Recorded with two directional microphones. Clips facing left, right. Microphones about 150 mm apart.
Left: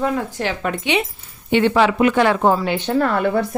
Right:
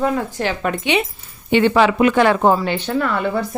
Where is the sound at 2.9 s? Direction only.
45° left (ahead or behind).